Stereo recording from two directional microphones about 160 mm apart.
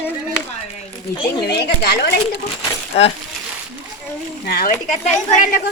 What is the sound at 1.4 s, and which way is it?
Speech, 90° left.